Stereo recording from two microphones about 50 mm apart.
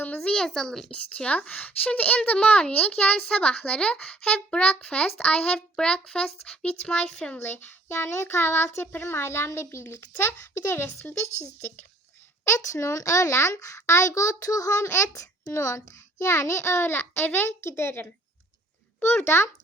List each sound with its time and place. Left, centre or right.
0.3 s speech: centre
0.9 s a child's voice: left
5.7 s a child's voice: centre
7.3 s speech: left
12.5 s a child's voice: left
15.6 s a child's voice: left
19.2 s speech: left